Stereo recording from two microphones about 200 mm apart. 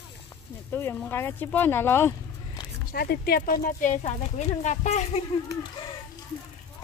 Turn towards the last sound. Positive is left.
turn(degrees=40)  # may be behind; listen again after turning